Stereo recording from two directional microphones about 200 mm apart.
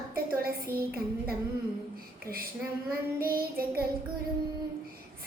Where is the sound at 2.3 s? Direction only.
15° right (ahead or behind).